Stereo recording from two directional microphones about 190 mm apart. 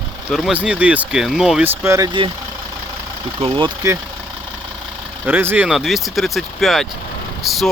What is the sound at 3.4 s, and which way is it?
Speech, 25° right (ahead or behind).